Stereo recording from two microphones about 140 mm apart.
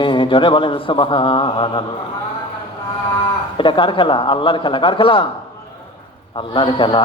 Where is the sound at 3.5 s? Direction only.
35° left (ahead or behind).